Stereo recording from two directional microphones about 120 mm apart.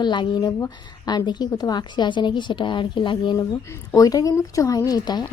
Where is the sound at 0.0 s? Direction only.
40° left (ahead or behind).